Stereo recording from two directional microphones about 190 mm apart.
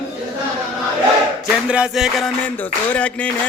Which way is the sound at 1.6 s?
5° right (ahead or behind).